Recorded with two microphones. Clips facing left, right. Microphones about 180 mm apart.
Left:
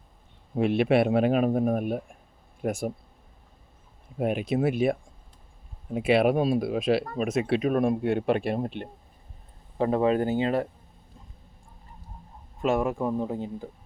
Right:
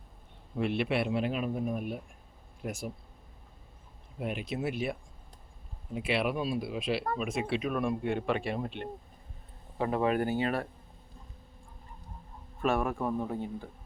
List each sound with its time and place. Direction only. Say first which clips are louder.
0.5 s speech: left 8 dB; 45° left (ahead or behind)
4.2 s speech: left 9 dB; 50° left (ahead or behind)
8.0 s a man's voice: left 6 dB; 65° left (ahead or behind)
9.7 s speech: left 5 dB; 30° left (ahead or behind)
12.6 s speech: left 4 dB; 20° left (ahead or behind)